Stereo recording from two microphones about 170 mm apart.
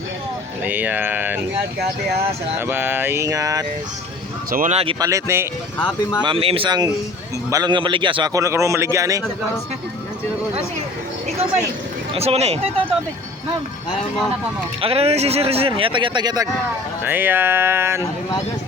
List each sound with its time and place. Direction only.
0.6 s mantra: 10° right (ahead or behind)
2.6 s mantra: 10° right (ahead or behind)
4.5 s speech: 50° right (ahead or behind)
4.9 s a man's voice: 20° right (ahead or behind)
5.8 s speech: 25° left (ahead or behind)
6.2 s a man's voice: 35° right (ahead or behind)
12.1 s speech: 35° right (ahead or behind)
14.8 s speech: 35° right (ahead or behind)
17.0 s mantra: 10° right (ahead or behind)